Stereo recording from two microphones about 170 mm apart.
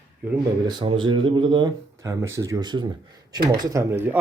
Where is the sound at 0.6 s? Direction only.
30° right (ahead or behind).